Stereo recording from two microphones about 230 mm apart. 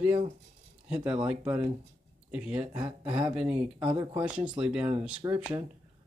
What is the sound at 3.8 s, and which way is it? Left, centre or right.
Speech, centre.